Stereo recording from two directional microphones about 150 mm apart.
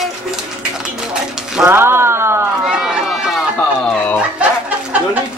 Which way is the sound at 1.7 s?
15° right (ahead or behind).